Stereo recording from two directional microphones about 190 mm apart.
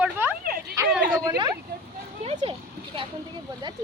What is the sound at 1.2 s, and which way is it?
Speech, 20° right (ahead or behind).